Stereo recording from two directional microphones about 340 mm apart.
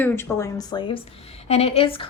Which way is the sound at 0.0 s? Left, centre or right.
Centre.